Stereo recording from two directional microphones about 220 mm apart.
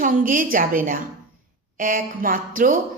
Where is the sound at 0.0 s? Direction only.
40° right (ahead or behind).